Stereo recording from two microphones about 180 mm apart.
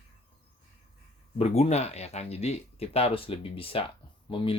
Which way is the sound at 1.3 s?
35° left (ahead or behind).